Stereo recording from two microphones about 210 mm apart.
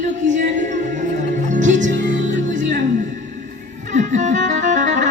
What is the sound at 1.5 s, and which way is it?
Music, 35° right (ahead or behind).